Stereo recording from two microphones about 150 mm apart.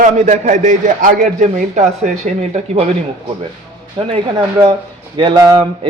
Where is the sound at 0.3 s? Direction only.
55° right (ahead or behind).